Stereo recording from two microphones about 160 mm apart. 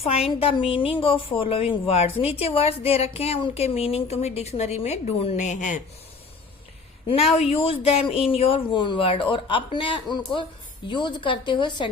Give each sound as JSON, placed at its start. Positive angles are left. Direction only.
{"t": 0.0, "sound": "speech", "side_deg": 35}
{"t": 7.1, "sound": "a woman's voice", "side_deg": 40}